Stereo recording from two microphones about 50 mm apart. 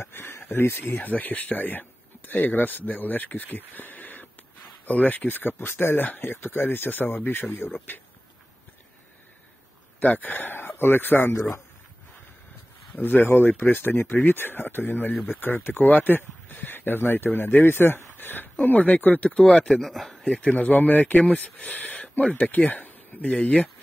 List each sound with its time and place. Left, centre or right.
0.0 s speech: left
9.9 s a man's voice: left
12.9 s speech: left
19.5 s speech: centre
19.8 s speech: centre
20.2 s speech: left
20.5 s speech: left